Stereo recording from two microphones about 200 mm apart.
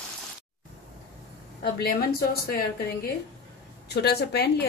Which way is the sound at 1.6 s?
50° left (ahead or behind).